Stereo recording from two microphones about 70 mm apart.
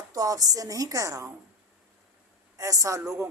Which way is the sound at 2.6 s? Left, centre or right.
Right.